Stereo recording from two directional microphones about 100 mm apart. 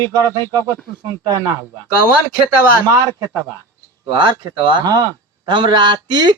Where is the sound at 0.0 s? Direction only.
40° right (ahead or behind).